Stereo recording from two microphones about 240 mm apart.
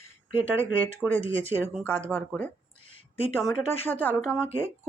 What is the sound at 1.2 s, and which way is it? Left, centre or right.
Speech, left.